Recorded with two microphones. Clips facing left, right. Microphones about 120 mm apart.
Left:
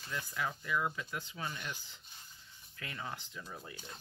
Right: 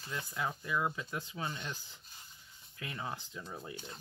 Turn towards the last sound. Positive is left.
turn(degrees=-20)  # may be behind; listen again after turning